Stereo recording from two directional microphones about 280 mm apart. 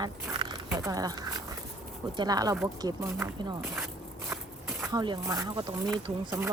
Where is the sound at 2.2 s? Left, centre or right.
Centre.